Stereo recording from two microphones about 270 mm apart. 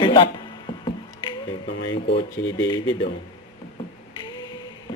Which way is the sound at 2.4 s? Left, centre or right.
Left.